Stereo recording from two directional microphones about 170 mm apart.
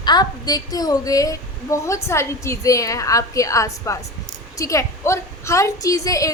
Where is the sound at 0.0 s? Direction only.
25° left (ahead or behind).